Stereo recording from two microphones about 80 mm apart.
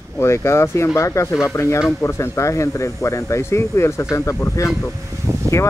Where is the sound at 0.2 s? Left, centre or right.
Left.